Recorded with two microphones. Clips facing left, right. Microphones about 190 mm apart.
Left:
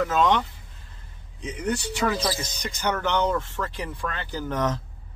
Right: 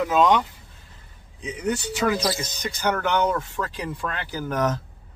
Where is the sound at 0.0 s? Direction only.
15° right (ahead or behind).